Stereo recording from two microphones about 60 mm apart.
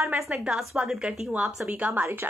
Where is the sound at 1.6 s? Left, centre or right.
Right.